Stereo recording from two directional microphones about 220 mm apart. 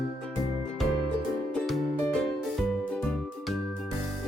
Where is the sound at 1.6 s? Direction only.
Centre (ahead or behind).